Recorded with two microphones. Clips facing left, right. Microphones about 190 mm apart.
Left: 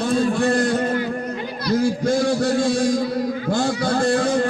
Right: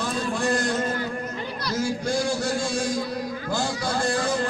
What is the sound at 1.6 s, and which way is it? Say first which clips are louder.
A man's voice: left 8 dB; 60° left (ahead or behind).